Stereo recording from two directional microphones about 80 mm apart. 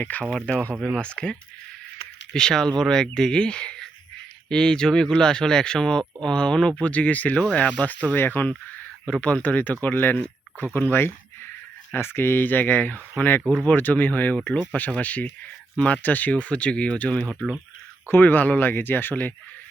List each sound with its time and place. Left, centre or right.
0.0 s speech: left
0.3 s speech: centre